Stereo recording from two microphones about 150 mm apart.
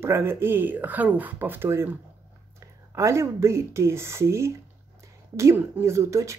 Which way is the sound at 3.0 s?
20° right (ahead or behind).